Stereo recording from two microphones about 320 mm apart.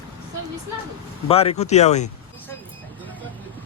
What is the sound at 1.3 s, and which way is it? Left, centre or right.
Speech, centre.